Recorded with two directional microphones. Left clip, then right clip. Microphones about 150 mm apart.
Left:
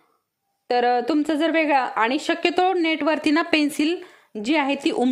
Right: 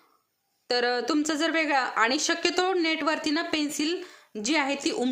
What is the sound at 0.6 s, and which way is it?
Speech, 30° left (ahead or behind).